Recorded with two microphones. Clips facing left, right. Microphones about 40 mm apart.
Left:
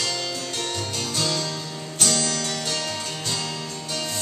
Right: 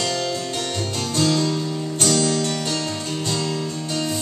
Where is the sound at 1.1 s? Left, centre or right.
Centre.